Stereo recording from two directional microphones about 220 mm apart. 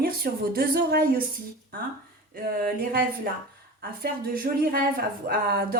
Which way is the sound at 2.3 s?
40° right (ahead or behind).